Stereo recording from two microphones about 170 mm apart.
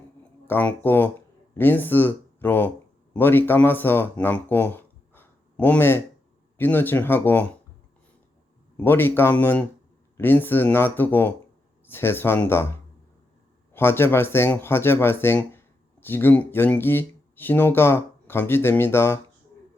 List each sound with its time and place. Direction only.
0.4 s speech: 10° left (ahead or behind)
8.8 s speech: 15° left (ahead or behind)
13.7 s speech: 15° left (ahead or behind)